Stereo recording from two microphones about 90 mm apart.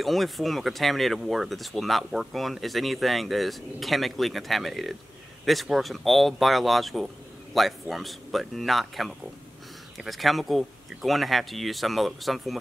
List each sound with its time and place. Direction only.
0.0 s speech: centre (ahead or behind)